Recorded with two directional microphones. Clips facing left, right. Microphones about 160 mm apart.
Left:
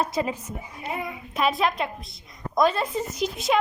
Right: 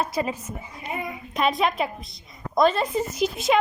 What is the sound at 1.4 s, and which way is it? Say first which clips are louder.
Speech: right 1 dB; centre (ahead or behind).